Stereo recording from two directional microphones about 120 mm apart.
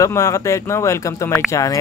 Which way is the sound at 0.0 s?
25° left (ahead or behind).